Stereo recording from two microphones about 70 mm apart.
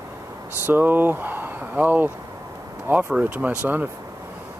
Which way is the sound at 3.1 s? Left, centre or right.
Centre.